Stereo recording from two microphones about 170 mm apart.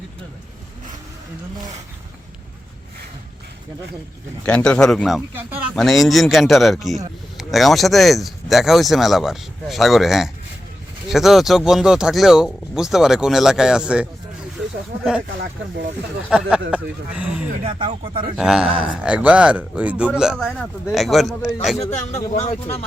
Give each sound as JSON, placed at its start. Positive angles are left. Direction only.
{"t": 4.4, "sound": "speech", "side_deg": 5}
{"t": 16.3, "sound": "speech", "side_deg": -5}
{"t": 17.6, "sound": "speech", "side_deg": -35}
{"t": 18.3, "sound": "speech", "side_deg": -5}
{"t": 22.3, "sound": "a man's voice", "side_deg": 40}